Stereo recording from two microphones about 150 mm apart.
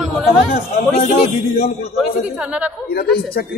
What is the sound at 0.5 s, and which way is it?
Speech, 75° left (ahead or behind).